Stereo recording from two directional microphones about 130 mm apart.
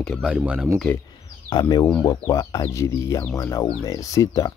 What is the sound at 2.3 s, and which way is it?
Speech, 25° left (ahead or behind).